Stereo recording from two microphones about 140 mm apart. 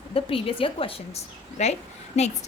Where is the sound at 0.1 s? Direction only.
40° left (ahead or behind).